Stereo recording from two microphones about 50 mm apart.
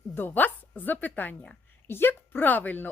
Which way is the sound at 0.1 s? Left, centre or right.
Left.